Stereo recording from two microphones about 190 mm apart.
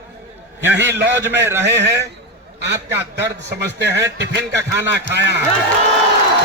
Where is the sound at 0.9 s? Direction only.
65° right (ahead or behind).